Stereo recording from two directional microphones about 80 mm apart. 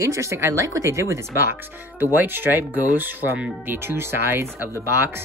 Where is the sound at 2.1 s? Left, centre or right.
Right.